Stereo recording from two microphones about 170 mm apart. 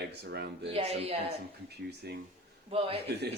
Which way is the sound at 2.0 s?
70° right (ahead or behind).